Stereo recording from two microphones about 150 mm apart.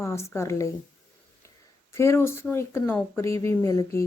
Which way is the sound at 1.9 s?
20° left (ahead or behind).